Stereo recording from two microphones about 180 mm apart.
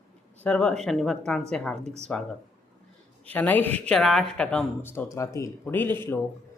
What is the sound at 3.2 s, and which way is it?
Mantra, 10° left (ahead or behind).